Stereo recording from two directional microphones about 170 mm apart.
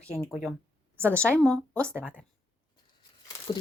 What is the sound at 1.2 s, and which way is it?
Speech, 5° left (ahead or behind).